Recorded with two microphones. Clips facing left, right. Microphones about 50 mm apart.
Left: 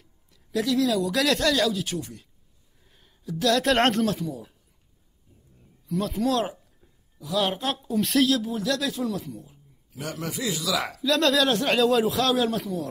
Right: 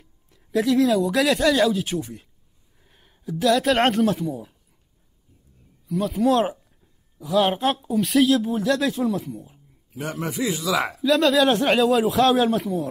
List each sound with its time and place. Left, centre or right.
0.6 s speech: centre
4.0 s speech: centre
5.9 s speech: centre
6.3 s speech: right
7.9 s speech: centre
8.4 s speech: right
9.4 s a sound: right
10.2 s speech: right
11.1 s speech: centre
11.4 s speech: centre
12.2 s speech: right